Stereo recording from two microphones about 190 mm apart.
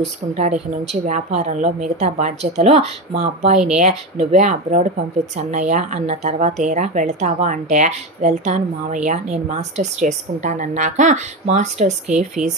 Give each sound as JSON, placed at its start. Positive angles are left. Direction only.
{"t": 0.3, "sound": "speech", "side_deg": -35}